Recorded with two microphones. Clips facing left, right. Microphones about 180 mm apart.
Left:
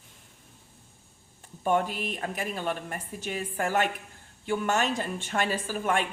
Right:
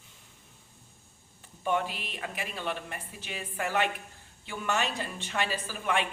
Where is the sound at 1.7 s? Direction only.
45° left (ahead or behind).